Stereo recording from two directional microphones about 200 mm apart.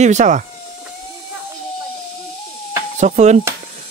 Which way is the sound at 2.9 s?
35° right (ahead or behind).